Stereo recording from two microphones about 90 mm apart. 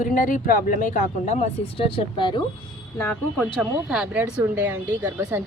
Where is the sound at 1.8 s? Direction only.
75° left (ahead or behind).